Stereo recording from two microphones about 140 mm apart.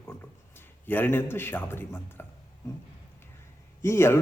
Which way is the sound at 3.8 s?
20° left (ahead or behind).